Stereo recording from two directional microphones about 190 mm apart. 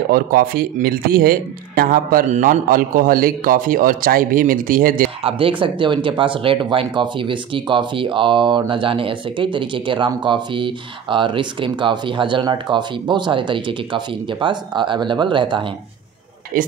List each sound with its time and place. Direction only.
0.1 s speech: 50° right (ahead or behind)
5.2 s speech: 25° right (ahead or behind)
16.5 s speech: 50° right (ahead or behind)